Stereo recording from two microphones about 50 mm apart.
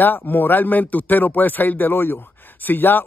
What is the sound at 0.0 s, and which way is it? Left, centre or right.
Speech, left.